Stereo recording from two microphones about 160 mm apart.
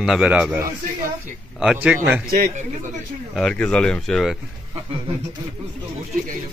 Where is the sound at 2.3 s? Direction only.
60° right (ahead or behind).